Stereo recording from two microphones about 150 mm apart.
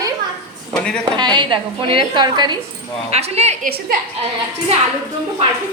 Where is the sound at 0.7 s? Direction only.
5° left (ahead or behind).